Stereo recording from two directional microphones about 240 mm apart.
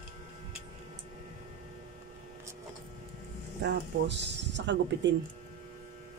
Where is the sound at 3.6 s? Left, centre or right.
Right.